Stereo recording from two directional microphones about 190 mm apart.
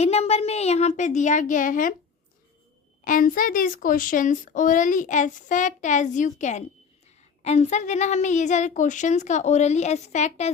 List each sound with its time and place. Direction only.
0.0 s a woman's voice: 35° left (ahead or behind)
3.0 s a woman's voice: 45° left (ahead or behind)